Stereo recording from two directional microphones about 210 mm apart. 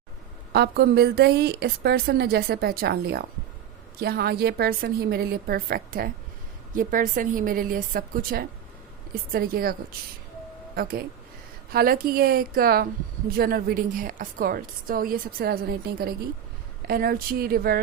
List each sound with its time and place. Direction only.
0.5 s a woman's voice: 50° right (ahead or behind)
11.7 s a woman's voice: 45° right (ahead or behind)